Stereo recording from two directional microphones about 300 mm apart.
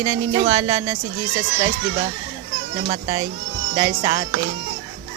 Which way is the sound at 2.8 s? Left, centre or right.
Centre.